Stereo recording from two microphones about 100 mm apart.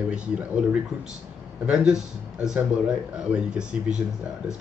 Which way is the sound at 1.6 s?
10° right (ahead or behind).